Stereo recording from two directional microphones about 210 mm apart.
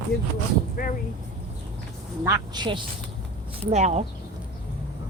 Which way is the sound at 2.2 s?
15° right (ahead or behind).